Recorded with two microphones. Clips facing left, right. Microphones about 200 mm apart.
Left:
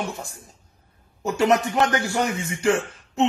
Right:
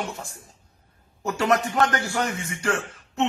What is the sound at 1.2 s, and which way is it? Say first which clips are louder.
Speech: left 3 dB; 20° left (ahead or behind).